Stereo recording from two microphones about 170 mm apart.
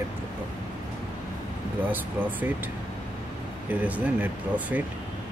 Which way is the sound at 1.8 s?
10° right (ahead or behind).